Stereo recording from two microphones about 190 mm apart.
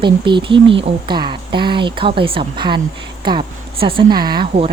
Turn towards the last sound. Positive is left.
turn(degrees=-25)  # may be behind; listen again after turning